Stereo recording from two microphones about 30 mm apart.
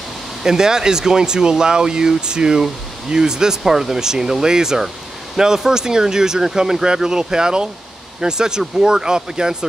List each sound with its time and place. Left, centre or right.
0.4 s speech: right